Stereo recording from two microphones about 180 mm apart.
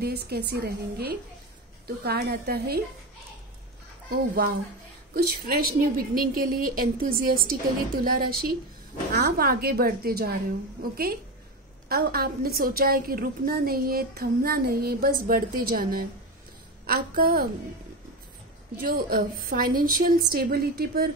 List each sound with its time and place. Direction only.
0.0 s a woman's voice: 60° right (ahead or behind)
5.1 s a woman's voice: 55° right (ahead or behind)
18.8 s a woman's voice: 55° right (ahead or behind)